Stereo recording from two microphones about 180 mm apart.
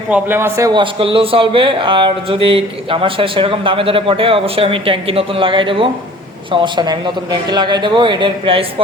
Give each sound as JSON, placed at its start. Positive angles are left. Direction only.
{"t": 0.1, "sound": "a man's voice", "side_deg": -10}